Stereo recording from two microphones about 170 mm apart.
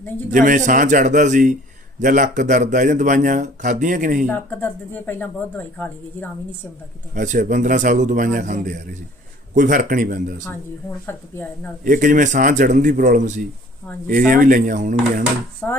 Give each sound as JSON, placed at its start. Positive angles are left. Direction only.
{"t": 0.3, "sound": "a man's voice", "side_deg": -50}
{"t": 4.3, "sound": "speech", "side_deg": 10}
{"t": 7.1, "sound": "a man's voice", "side_deg": -50}
{"t": 11.0, "sound": "speech", "side_deg": 10}
{"t": 11.9, "sound": "a man's voice", "side_deg": -50}
{"t": 15.6, "sound": "speech", "side_deg": 5}